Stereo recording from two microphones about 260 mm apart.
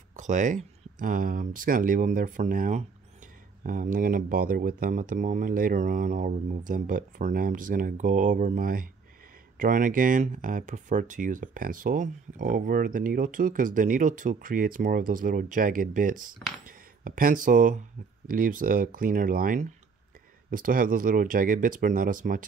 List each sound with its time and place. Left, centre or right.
0.1 s speech: right